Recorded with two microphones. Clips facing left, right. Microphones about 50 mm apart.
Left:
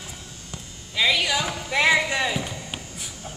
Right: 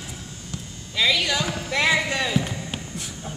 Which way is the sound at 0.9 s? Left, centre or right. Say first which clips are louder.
Even; centre.